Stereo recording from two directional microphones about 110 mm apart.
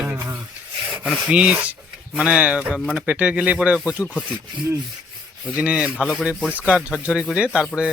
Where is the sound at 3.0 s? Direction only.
10° right (ahead or behind).